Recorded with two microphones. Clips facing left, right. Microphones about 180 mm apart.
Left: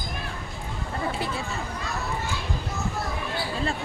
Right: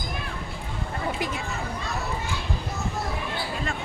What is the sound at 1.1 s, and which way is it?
Speech, 15° right (ahead or behind).